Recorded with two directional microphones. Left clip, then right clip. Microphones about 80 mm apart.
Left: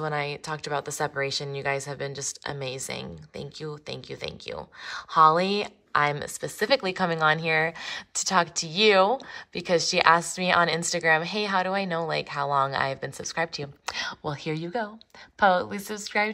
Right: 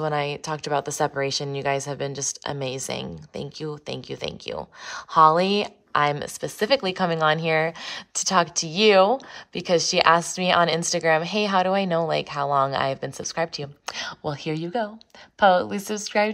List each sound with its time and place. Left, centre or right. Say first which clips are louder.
0.0 s a woman's voice: right 4 dB; right
15.7 s speech: right 4 dB; right